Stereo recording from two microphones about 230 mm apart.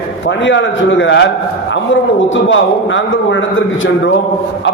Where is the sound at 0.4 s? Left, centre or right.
Left.